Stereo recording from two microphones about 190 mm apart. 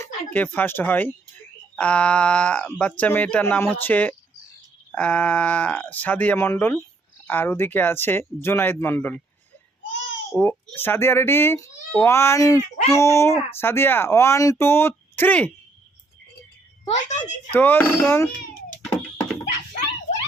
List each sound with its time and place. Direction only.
0.0 s speech: 10° left (ahead or behind)
10.3 s speech: 10° left (ahead or behind)
16.8 s a child's voice: 40° left (ahead or behind)
17.5 s speech: 10° left (ahead or behind)
18.9 s a sound: 5° left (ahead or behind)